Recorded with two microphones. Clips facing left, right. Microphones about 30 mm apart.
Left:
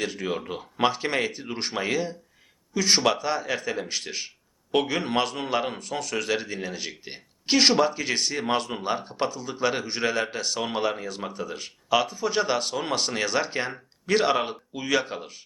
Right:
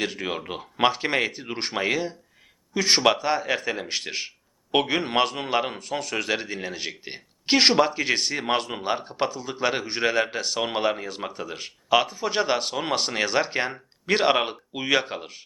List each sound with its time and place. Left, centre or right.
0.0 s a man's voice: centre